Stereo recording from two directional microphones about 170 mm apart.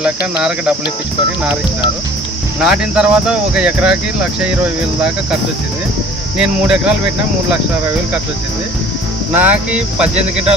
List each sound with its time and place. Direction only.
0.0 s speech: 5° right (ahead or behind)
2.6 s speech: 5° right (ahead or behind)
6.4 s speech: 5° right (ahead or behind)
9.3 s speech: 10° right (ahead or behind)